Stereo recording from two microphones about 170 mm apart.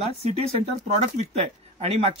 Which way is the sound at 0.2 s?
35° right (ahead or behind).